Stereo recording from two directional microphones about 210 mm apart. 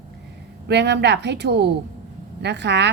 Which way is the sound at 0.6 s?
55° right (ahead or behind).